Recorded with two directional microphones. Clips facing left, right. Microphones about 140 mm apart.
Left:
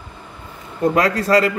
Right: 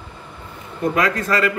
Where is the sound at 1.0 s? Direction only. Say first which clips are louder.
Left 4 dB; 35° left (ahead or behind).